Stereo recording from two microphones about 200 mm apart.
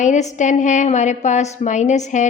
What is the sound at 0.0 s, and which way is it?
A woman's voice, 35° left (ahead or behind).